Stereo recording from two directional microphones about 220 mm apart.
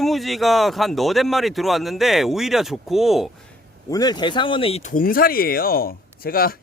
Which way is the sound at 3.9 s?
15° left (ahead or behind).